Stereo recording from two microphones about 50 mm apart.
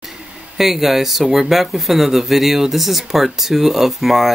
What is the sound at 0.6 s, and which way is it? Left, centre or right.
Speech, centre.